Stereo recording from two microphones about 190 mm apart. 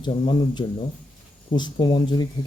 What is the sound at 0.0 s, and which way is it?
Speech, 25° left (ahead or behind).